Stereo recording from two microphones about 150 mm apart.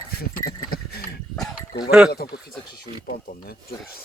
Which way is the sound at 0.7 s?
90° left.